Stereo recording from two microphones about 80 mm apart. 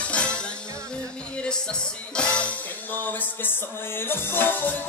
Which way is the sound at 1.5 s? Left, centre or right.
Centre.